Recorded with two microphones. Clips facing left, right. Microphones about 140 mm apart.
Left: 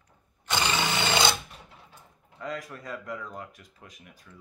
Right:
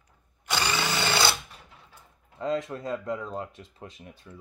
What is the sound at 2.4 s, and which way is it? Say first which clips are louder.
Speech: right 7 dB; 25° right (ahead or behind).